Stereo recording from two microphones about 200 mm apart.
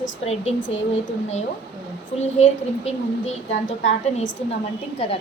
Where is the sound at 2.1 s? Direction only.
35° left (ahead or behind).